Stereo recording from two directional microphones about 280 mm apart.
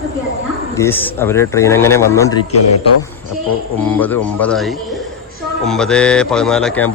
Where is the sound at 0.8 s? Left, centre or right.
Centre.